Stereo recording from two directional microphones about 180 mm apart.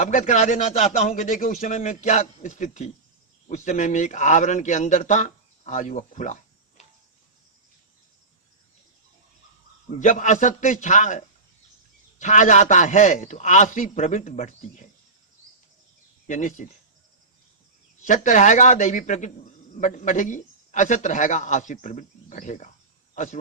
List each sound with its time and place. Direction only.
0.0 s a man's voice: 40° left (ahead or behind)
10.0 s a man's voice: 45° left (ahead or behind)
16.2 s speech: 45° left (ahead or behind)
18.0 s a man's voice: 45° left (ahead or behind)